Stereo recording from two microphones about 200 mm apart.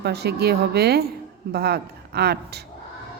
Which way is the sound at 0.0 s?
55° right (ahead or behind).